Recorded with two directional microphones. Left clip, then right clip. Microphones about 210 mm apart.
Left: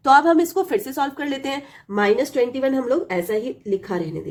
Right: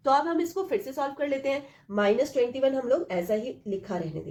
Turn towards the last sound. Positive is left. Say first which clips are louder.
# left 8 dB
turn(degrees=45)  # may be behind; listen again after turning